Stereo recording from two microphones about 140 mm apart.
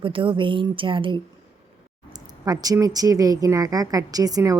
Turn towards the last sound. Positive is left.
turn(degrees=-25)  # may be behind; listen again after turning